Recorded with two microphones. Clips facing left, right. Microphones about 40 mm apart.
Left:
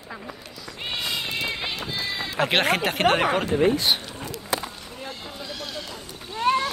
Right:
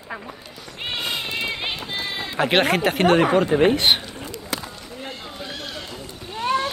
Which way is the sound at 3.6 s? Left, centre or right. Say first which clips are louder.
Right 3 dB; right.